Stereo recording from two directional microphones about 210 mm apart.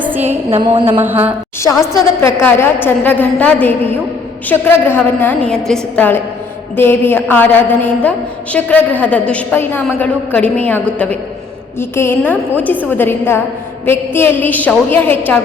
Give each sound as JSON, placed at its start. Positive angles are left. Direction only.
{"t": 0.2, "sound": "a woman's voice", "side_deg": -30}
{"t": 1.0, "sound": "a woman's voice", "side_deg": -10}
{"t": 2.2, "sound": "a woman's voice", "side_deg": 10}